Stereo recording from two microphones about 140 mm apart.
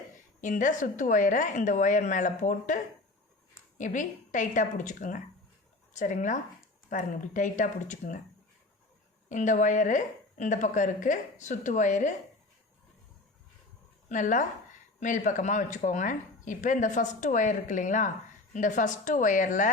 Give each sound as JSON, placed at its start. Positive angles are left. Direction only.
{"t": 0.4, "sound": "speech", "side_deg": 65}
{"t": 9.3, "sound": "speech", "side_deg": 60}
{"t": 14.1, "sound": "a woman's voice", "side_deg": 65}